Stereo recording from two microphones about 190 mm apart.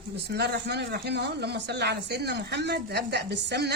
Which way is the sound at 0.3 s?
65° right (ahead or behind).